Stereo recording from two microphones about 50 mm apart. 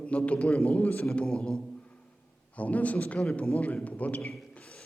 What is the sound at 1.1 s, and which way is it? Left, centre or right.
Speech, centre.